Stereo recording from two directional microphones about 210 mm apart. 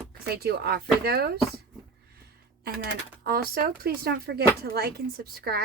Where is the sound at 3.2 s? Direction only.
45° right (ahead or behind).